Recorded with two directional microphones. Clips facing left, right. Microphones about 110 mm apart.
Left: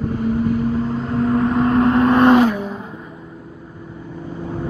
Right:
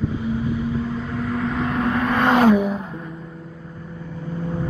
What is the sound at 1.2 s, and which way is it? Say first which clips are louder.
Vehicle: left 8 dB; 35° left (ahead or behind).